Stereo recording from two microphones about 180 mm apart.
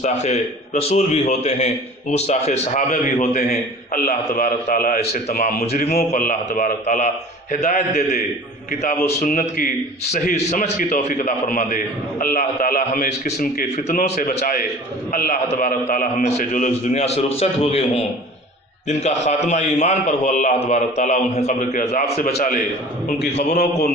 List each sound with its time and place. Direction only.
0.0 s a man's voice: 40° left (ahead or behind)
9.2 s a man's voice: 50° left (ahead or behind)
23.1 s a man's voice: 70° left (ahead or behind)
23.4 s a man's voice: 40° left (ahead or behind)